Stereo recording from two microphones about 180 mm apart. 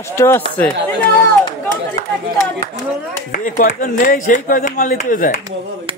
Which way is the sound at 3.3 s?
50° left (ahead or behind).